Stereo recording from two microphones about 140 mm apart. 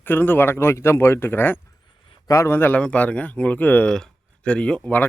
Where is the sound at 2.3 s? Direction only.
20° left (ahead or behind).